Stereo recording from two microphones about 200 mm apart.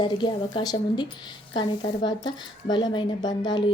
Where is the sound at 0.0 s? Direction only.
20° left (ahead or behind).